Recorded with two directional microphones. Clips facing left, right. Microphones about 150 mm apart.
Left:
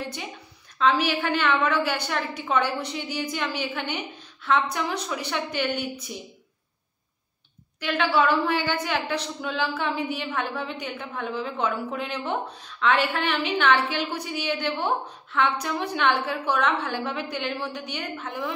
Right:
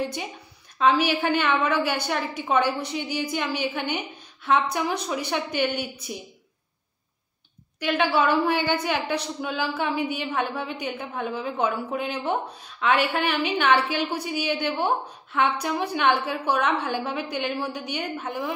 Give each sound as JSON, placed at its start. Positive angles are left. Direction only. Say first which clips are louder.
{"t": 0.7, "sound": "a woman's voice", "louder": "right 2 dB", "side_deg": -15}
{"t": 7.8, "sound": "a woman's voice", "louder": "even", "side_deg": -15}